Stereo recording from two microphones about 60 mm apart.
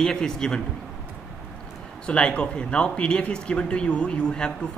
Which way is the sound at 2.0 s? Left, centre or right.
Centre.